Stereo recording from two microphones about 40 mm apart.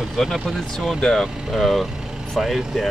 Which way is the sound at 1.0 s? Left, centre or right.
Centre.